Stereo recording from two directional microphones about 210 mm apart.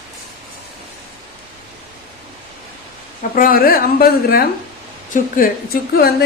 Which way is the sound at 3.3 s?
45° left (ahead or behind).